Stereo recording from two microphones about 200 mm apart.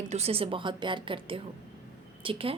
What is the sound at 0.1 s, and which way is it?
A woman's voice, 30° right (ahead or behind).